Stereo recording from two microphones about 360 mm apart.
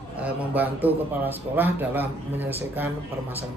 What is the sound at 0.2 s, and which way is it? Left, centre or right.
A man's voice, centre.